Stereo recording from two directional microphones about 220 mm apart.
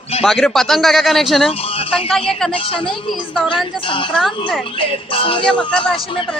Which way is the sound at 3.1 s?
Centre (ahead or behind).